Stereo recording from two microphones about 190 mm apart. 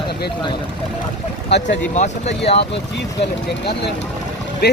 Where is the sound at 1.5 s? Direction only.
65° left (ahead or behind).